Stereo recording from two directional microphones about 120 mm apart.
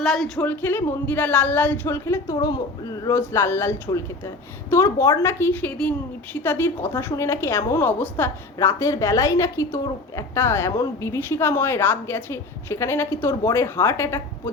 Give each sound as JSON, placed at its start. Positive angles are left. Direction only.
{"t": 0.0, "sound": "speech", "side_deg": 0}
{"t": 0.4, "sound": "a woman's voice", "side_deg": 15}
{"t": 8.5, "sound": "a woman's voice", "side_deg": 25}